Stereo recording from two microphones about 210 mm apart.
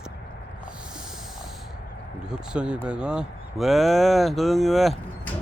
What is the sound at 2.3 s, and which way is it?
Speech, 5° right (ahead or behind).